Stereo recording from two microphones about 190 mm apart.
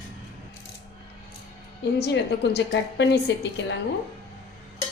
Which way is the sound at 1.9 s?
65° left (ahead or behind).